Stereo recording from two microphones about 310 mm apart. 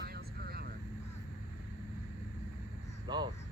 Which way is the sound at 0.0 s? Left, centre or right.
Right.